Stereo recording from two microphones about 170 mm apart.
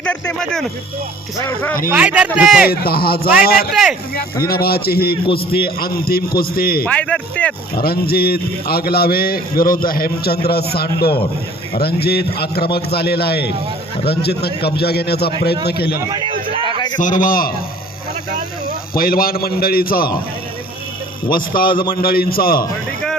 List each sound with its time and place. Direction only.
0.0 s speech: 5° left (ahead or behind)
1.9 s speech: 5° right (ahead or behind)
2.6 s a man's voice: 65° left (ahead or behind)
3.7 s speech: centre (ahead or behind)
4.1 s a man's voice: 60° left (ahead or behind)
6.8 s a man's voice: 5° left (ahead or behind)
7.8 s a man's voice: 65° left (ahead or behind)
16.0 s a sound: 20° right (ahead or behind)
16.6 s a sound: 25° left (ahead or behind)
17.0 s a man's voice: 50° left (ahead or behind)
18.6 s a man's voice: 60° left (ahead or behind)
21.2 s a man's voice: 55° left (ahead or behind)